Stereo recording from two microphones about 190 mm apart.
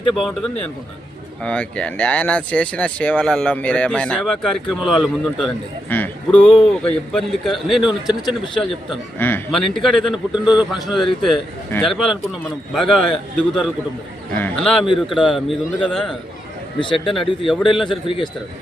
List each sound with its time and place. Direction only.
0.1 s speech: centre (ahead or behind)
5.9 s speech: 10° left (ahead or behind)
9.1 s speech: 10° left (ahead or behind)
14.3 s speech: 5° left (ahead or behind)
16.8 s a man's voice: 25° left (ahead or behind)
17.2 s speech: centre (ahead or behind)
17.8 s a man's voice: 25° left (ahead or behind)